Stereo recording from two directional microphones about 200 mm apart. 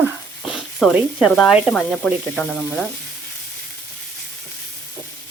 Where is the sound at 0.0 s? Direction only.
5° right (ahead or behind).